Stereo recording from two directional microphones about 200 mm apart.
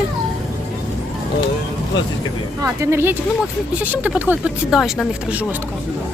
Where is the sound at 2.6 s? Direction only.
15° right (ahead or behind).